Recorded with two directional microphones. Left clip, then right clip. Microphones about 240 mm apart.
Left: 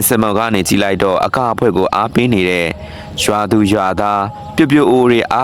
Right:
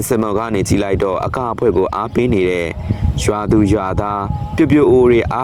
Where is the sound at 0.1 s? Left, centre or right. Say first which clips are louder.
Left 3 dB; left.